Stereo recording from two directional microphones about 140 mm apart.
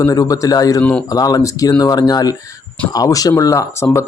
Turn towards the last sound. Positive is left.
turn(degrees=20)  # may be behind; listen again after turning